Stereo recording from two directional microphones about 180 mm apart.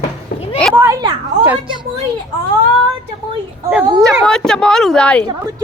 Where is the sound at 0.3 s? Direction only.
55° left (ahead or behind).